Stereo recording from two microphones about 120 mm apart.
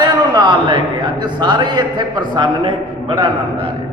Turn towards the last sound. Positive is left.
turn(degrees=-45)  # may be behind; listen again after turning